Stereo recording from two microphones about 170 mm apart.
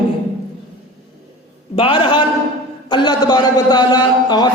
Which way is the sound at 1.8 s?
30° left (ahead or behind).